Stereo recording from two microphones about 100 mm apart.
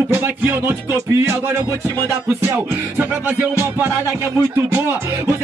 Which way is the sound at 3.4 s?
20° right (ahead or behind).